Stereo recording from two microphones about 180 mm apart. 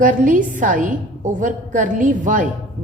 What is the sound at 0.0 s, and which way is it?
A woman's voice, 45° right (ahead or behind).